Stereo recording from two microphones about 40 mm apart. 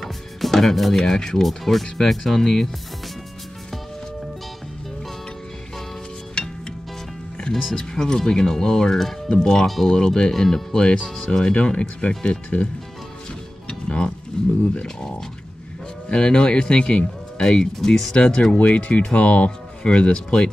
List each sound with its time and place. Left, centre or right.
0.0 s music: centre
1.0 s speech: centre
6.4 s music: centre
7.7 s speech: centre
11.5 s speech: left
13.7 s music: left
14.4 s speech: centre
18.1 s speech: left
18.6 s speech: left